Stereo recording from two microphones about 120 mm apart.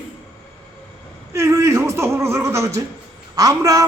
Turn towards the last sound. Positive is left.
turn(degrees=-30)  # may be behind; listen again after turning